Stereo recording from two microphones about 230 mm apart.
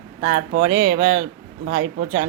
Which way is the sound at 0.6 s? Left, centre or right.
Right.